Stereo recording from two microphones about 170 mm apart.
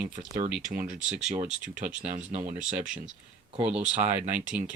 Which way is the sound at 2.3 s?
45° right (ahead or behind).